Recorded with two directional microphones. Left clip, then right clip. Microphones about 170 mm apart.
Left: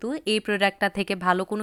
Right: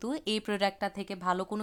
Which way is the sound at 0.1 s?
5° left (ahead or behind).